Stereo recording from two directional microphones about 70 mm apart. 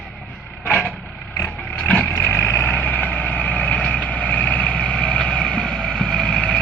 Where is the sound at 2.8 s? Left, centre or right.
Left.